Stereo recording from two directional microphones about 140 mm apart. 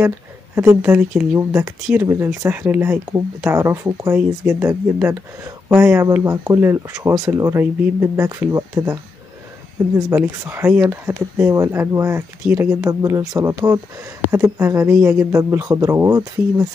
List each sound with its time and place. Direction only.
0.6 s speech: 15° right (ahead or behind)
10.1 s speech: 15° right (ahead or behind)